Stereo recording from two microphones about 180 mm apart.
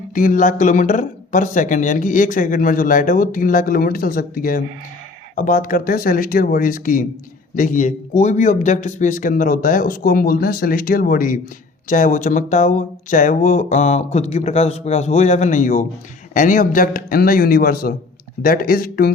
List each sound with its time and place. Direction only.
0.1 s speech: 50° left (ahead or behind)